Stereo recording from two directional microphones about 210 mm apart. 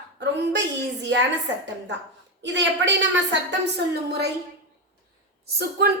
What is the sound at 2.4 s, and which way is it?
A woman's voice, 60° right (ahead or behind).